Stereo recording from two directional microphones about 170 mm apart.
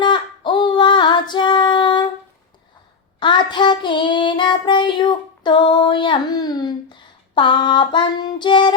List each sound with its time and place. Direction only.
0.0 s female singing: 30° left (ahead or behind)
3.2 s child singing: 30° left (ahead or behind)
7.3 s female singing: 30° left (ahead or behind)